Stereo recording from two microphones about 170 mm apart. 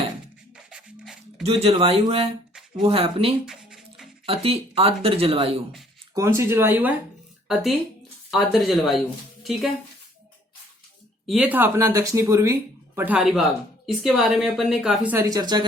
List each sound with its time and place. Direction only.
0.5 s a sound: 5° right (ahead or behind)
1.5 s speech: 35° right (ahead or behind)
3.4 s a sound: 5° right (ahead or behind)
4.3 s speech: 35° right (ahead or behind)
6.1 s speech: 15° right (ahead or behind)
8.3 s speech: centre (ahead or behind)
11.3 s speech: 5° right (ahead or behind)
13.0 s speech: 5° right (ahead or behind)
15.1 s speech: 20° right (ahead or behind)